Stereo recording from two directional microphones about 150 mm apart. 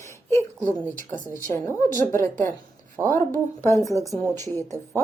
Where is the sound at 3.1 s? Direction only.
15° left (ahead or behind).